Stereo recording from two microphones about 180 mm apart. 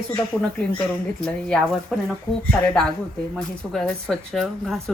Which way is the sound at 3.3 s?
Centre (ahead or behind).